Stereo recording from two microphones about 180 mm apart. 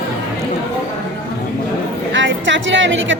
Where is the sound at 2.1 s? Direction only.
90° right.